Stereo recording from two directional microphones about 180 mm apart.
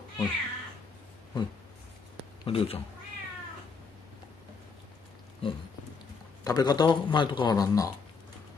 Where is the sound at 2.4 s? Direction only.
30° left (ahead or behind).